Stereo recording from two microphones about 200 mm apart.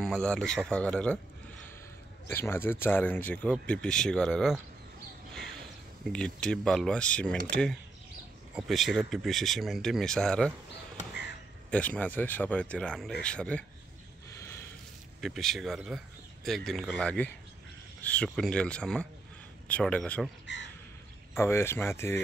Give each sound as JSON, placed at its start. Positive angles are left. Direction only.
{"t": 0.0, "sound": "speech", "side_deg": 5}
{"t": 2.2, "sound": "speech", "side_deg": 10}
{"t": 5.3, "sound": "crow", "side_deg": 5}
{"t": 6.1, "sound": "speech", "side_deg": 5}
{"t": 8.5, "sound": "speech", "side_deg": 0}
{"t": 11.7, "sound": "speech", "side_deg": 5}
{"t": 14.3, "sound": "a sound", "side_deg": 15}
{"t": 15.1, "sound": "speech", "side_deg": 0}
{"t": 20.5, "sound": "speech", "side_deg": 65}
{"t": 21.4, "sound": "speech", "side_deg": 10}